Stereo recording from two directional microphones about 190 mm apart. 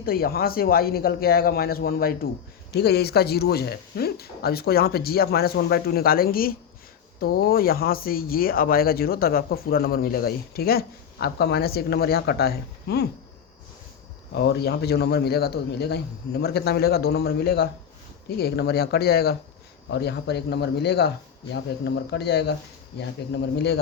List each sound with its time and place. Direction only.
0.0 s speech: 50° left (ahead or behind)
14.3 s a man's voice: 55° left (ahead or behind)